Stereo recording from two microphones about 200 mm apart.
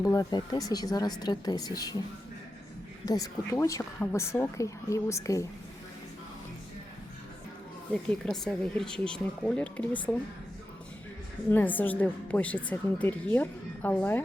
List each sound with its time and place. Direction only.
0.0 s speech: 20° left (ahead or behind)
3.1 s a woman's voice: 15° left (ahead or behind)
8.2 s speech: 5° left (ahead or behind)
11.5 s a woman's voice: 10° left (ahead or behind)